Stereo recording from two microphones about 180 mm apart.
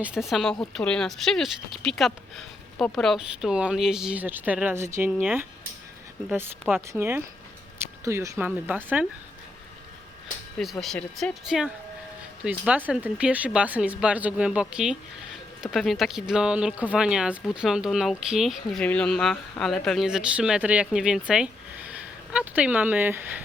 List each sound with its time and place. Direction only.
0.0 s speech: 5° right (ahead or behind)
10.6 s speech: centre (ahead or behind)